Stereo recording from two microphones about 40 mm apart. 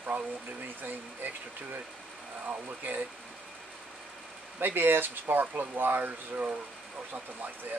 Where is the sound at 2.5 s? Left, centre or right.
Right.